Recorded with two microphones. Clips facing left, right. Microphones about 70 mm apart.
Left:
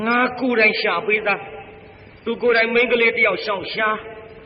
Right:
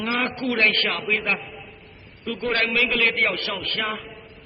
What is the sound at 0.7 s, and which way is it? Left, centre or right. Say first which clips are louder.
Speech: left 5 dB; left.